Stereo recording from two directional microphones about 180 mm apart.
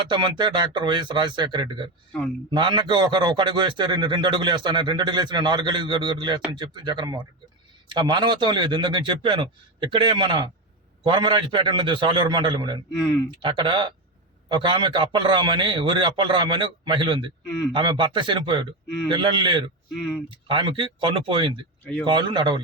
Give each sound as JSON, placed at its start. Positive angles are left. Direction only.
{"t": 0.1, "sound": "a man's voice", "side_deg": -25}
{"t": 12.9, "sound": "speech", "side_deg": 5}
{"t": 13.4, "sound": "a man's voice", "side_deg": -25}
{"t": 20.0, "sound": "speech", "side_deg": 5}
{"t": 20.3, "sound": "a man's voice", "side_deg": -30}